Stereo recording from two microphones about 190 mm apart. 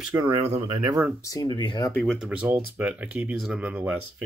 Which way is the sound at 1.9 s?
5° left (ahead or behind).